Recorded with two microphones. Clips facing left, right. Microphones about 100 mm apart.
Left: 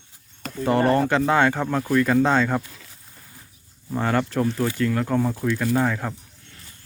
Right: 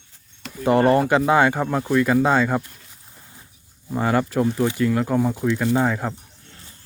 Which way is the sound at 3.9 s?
10° right (ahead or behind).